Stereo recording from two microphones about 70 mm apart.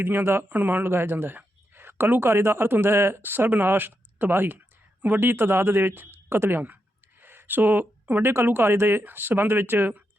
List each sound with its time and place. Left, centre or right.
0.0 s speech: right
7.2 s a sound: right
8.4 s speech: right